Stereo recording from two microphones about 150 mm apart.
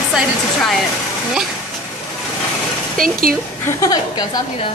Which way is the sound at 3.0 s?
70° right (ahead or behind).